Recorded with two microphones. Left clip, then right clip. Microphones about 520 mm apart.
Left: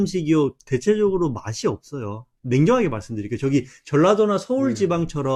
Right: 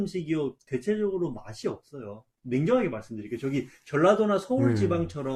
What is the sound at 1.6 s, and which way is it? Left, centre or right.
Speech, left.